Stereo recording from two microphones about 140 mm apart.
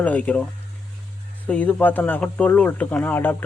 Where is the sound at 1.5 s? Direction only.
10° left (ahead or behind).